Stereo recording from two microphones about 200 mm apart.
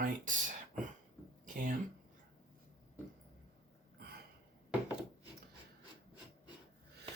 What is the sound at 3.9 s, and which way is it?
Gasp, 50° right (ahead or behind).